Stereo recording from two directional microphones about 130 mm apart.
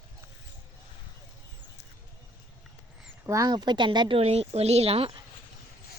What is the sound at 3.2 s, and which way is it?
Speech, 25° right (ahead or behind).